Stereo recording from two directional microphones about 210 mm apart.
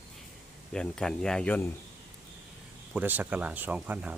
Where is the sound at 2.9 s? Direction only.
10° right (ahead or behind).